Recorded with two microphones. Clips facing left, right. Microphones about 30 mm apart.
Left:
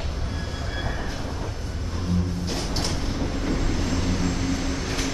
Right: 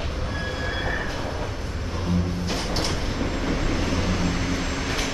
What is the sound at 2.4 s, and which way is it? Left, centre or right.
Music, centre.